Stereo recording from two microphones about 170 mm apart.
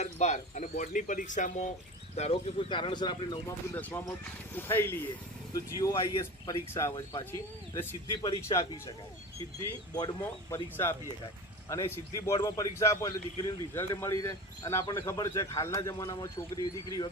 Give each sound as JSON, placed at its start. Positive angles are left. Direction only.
{"t": 0.0, "sound": "speech", "side_deg": 40}
{"t": 2.1, "sound": "speech", "side_deg": 35}
{"t": 3.4, "sound": "speech", "side_deg": 10}
{"t": 11.7, "sound": "speech", "side_deg": 15}